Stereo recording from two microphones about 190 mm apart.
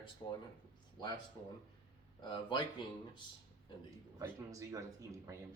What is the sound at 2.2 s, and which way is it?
Speech, 25° left (ahead or behind).